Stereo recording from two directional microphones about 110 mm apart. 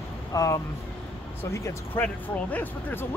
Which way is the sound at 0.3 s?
30° left (ahead or behind).